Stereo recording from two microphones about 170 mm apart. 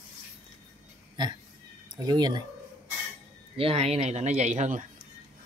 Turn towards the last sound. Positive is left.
turn(degrees=-45)  # may be behind; listen again after turning